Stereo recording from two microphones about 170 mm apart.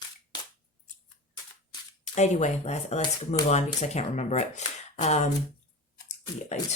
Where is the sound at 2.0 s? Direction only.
45° left (ahead or behind).